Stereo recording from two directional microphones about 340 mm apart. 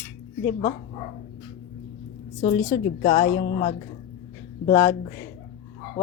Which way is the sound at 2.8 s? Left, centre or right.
Left.